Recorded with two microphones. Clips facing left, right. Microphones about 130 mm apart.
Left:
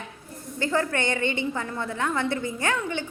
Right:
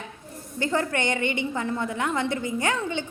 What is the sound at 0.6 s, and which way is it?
A woman's voice, 20° right (ahead or behind).